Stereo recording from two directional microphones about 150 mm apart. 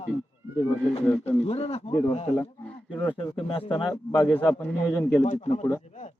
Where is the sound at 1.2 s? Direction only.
40° left (ahead or behind).